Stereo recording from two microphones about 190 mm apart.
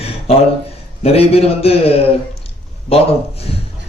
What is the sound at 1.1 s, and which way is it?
A man's voice, 30° left (ahead or behind).